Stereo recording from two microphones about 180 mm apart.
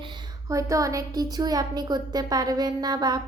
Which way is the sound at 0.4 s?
20° right (ahead or behind).